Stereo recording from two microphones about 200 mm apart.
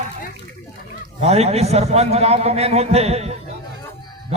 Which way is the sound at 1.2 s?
30° right (ahead or behind).